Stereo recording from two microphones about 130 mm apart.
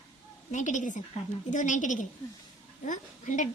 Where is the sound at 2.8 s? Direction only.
75° left (ahead or behind).